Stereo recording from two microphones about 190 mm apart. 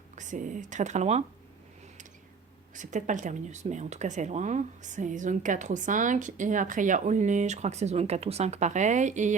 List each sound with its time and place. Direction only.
0.2 s speech: 40° right (ahead or behind)
2.7 s speech: 40° right (ahead or behind)